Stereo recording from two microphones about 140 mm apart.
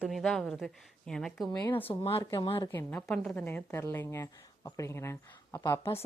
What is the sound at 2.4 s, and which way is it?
Speech, 40° left (ahead or behind).